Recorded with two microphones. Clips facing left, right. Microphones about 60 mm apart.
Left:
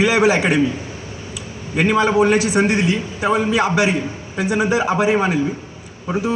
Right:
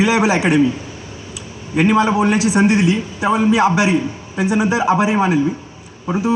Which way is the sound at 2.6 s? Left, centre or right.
Left.